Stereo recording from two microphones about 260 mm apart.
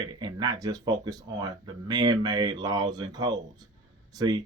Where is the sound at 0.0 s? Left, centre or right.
Centre.